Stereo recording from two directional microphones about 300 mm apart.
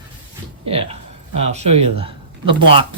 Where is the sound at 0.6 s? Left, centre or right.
Centre.